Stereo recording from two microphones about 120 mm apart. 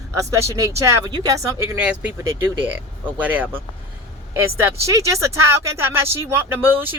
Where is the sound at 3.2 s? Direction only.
15° right (ahead or behind).